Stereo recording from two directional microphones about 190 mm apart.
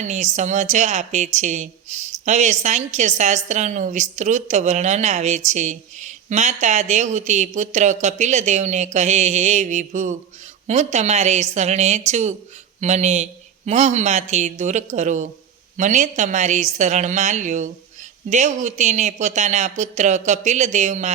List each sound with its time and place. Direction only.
0.0 s a woman's voice: 40° right (ahead or behind)